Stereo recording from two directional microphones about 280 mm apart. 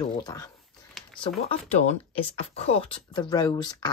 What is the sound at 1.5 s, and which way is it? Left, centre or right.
Speech, centre.